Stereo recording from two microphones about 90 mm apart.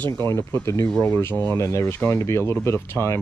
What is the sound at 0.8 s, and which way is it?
Speech, 10° left (ahead or behind).